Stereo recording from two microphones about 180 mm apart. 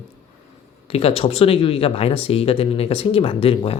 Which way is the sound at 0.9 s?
30° left (ahead or behind).